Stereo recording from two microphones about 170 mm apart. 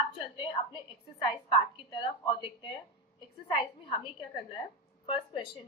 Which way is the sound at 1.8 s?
30° left (ahead or behind).